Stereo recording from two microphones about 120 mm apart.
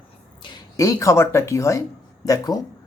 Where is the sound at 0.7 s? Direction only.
25° left (ahead or behind).